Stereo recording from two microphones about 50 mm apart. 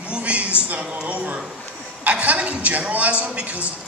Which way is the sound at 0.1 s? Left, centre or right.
Right.